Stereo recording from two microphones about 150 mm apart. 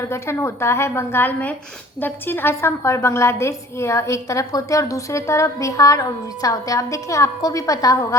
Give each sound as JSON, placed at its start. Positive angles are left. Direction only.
{"t": 0.0, "sound": "a woman's voice", "side_deg": 20}